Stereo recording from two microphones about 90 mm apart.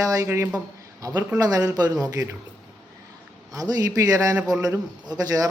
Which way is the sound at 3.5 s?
45° right (ahead or behind).